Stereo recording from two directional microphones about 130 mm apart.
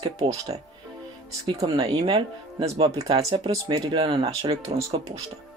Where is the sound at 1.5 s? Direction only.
30° right (ahead or behind); by 4.6 s 45° right (ahead or behind).